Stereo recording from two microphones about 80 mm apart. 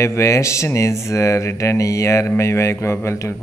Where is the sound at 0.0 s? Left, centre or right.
Left.